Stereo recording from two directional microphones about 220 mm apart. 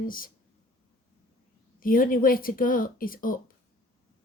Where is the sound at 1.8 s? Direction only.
40° left (ahead or behind).